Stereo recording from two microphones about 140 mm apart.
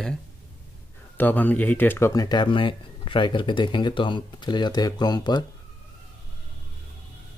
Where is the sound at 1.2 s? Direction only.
15° left (ahead or behind); by 5.5 s 30° left (ahead or behind).